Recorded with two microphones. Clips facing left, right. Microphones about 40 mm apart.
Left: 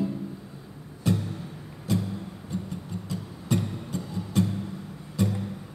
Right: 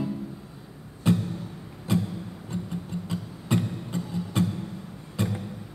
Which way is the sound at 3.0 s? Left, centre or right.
Right.